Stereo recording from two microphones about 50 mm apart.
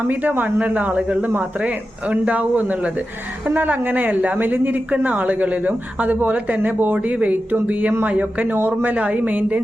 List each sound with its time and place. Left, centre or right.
0.1 s a woman's voice: right